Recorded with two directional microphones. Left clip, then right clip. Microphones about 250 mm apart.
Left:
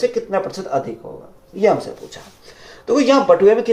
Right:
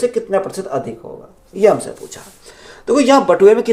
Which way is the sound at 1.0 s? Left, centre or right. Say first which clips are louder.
Right 2 dB; right.